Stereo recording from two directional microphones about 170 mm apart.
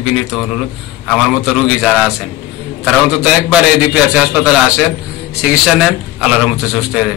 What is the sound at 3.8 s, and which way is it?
A man's voice, 5° right (ahead or behind).